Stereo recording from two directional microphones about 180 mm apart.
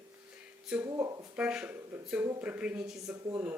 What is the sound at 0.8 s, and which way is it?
Speech, 20° right (ahead or behind).